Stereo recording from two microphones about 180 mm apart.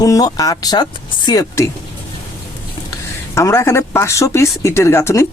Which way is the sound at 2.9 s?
15° left (ahead or behind).